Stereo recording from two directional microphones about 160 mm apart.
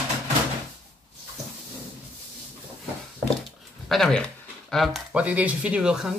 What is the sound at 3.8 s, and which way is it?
Speech, centre (ahead or behind).